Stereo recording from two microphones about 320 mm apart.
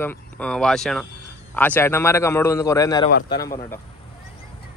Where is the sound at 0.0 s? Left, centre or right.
Centre.